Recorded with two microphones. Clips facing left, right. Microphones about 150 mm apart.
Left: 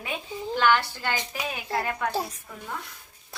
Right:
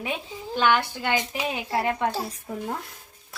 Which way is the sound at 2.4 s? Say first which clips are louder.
Right 6 dB; 40° right (ahead or behind).